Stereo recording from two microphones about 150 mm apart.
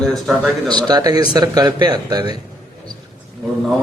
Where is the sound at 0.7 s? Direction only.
30° right (ahead or behind).